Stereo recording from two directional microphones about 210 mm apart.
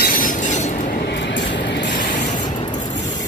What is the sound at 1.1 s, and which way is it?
Vehicle, 60° left (ahead or behind).